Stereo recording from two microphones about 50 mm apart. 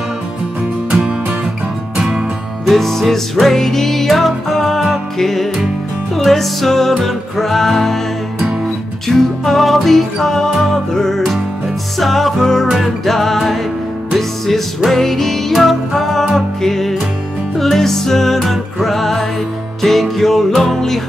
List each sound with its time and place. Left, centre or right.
0.9 s music: centre
2.7 s music: centre
9.0 s music: centre
12.6 s music: centre
13.0 s music: centre